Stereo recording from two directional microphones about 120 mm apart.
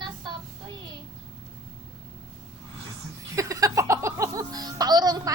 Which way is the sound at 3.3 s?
25° right (ahead or behind).